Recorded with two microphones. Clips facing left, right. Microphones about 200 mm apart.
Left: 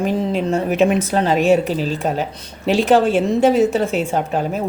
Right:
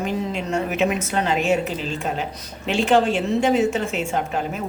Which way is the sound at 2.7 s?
35° left (ahead or behind).